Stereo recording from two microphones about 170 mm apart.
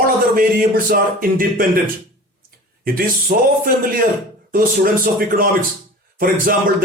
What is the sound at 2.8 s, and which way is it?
A man's voice, 55° right (ahead or behind).